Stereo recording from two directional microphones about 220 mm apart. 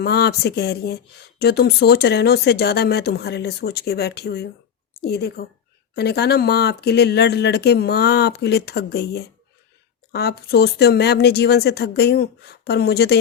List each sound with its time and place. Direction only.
0.0 s speech: 45° left (ahead or behind)